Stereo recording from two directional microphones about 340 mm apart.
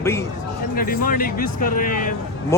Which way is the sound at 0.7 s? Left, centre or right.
Left.